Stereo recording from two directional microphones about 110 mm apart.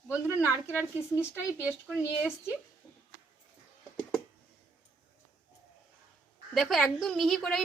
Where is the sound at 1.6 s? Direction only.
10° right (ahead or behind).